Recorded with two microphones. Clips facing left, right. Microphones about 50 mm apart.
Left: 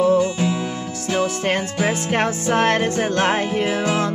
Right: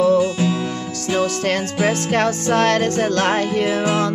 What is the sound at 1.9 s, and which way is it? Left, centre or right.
Music, centre.